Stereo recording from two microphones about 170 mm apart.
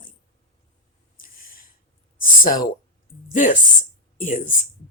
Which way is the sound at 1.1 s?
55° left (ahead or behind).